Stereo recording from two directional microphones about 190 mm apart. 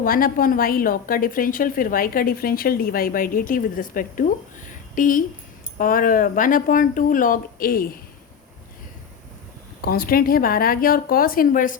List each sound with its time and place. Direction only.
0.0 s a woman's voice: 50° left (ahead or behind)
9.8 s a woman's voice: 50° left (ahead or behind)